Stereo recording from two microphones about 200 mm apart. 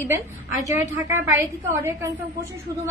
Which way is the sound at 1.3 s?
10° right (ahead or behind).